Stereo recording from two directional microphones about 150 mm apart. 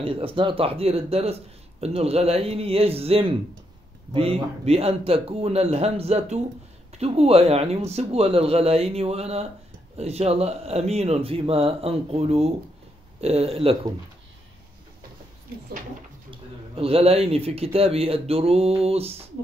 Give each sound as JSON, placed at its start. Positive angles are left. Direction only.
{"t": 0.0, "sound": "speech", "side_deg": -40}
{"t": 16.3, "sound": "a man's voice", "side_deg": -40}